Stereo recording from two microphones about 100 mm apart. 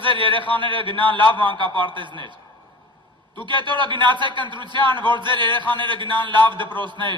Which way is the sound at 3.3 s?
55° right (ahead or behind).